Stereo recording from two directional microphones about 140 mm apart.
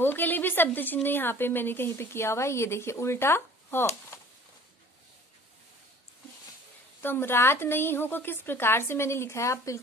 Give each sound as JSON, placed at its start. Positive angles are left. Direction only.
{"t": 0.0, "sound": "a woman's voice", "side_deg": 15}
{"t": 7.0, "sound": "a woman's voice", "side_deg": 15}